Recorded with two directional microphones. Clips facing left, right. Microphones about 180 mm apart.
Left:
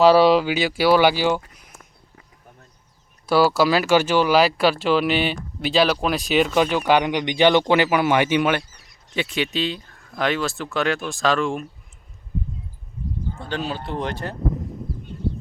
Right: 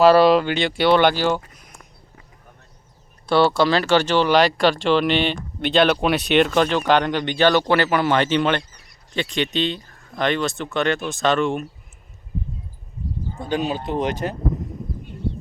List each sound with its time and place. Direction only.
0.2 s speech: 5° left (ahead or behind)
3.2 s speech: 5° left (ahead or behind)
13.3 s speech: 15° right (ahead or behind)